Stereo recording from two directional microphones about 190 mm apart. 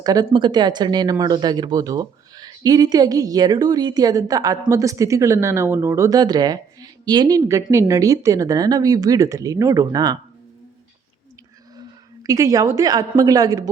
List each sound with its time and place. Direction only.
0.0 s speech: 20° right (ahead or behind)
11.8 s a woman's voice: 20° right (ahead or behind)